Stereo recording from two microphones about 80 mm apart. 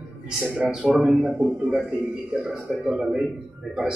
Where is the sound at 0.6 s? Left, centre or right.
Centre.